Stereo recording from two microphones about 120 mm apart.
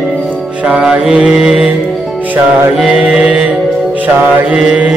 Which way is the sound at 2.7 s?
5° right (ahead or behind).